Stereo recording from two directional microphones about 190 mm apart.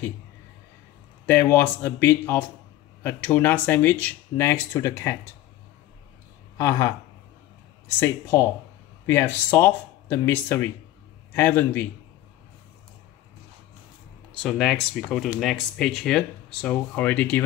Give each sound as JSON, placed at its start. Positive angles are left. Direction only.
{"t": 1.2, "sound": "speech", "side_deg": 10}
{"t": 6.6, "sound": "speech", "side_deg": 20}
{"t": 8.0, "sound": "speech", "side_deg": 15}
{"t": 14.3, "sound": "speech", "side_deg": 0}